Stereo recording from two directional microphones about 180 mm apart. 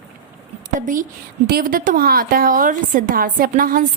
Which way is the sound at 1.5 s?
55° right (ahead or behind).